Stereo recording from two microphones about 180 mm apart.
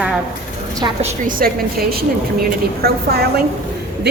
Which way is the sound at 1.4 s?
55° right (ahead or behind).